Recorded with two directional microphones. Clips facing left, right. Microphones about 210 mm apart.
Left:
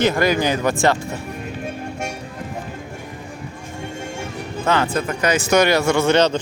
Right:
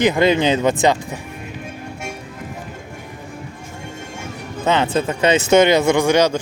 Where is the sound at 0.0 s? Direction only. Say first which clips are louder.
Right 2 dB; 20° right (ahead or behind).